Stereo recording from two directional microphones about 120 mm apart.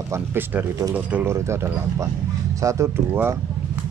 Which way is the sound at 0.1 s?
20° right (ahead or behind).